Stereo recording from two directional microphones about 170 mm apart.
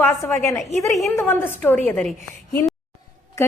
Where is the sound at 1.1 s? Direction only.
15° left (ahead or behind).